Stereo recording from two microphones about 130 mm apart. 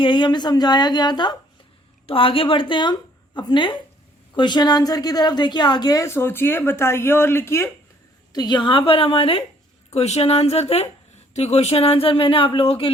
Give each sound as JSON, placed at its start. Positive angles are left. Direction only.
{"t": 0.0, "sound": "a woman's voice", "side_deg": 40}
{"t": 8.3, "sound": "speech", "side_deg": 30}
{"t": 9.9, "sound": "speech", "side_deg": 55}